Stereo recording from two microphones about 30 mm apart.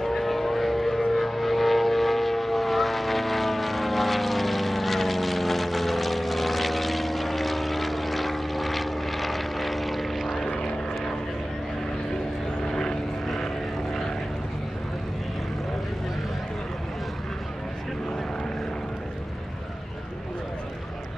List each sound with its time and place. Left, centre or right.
0.0 s vehicle: centre
10.4 s vehicle: left
12.6 s vehicle: centre